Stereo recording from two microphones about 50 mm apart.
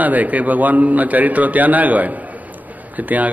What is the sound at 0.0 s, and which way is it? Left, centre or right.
A man's voice, right.